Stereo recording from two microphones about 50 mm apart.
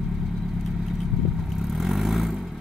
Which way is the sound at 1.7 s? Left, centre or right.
Centre.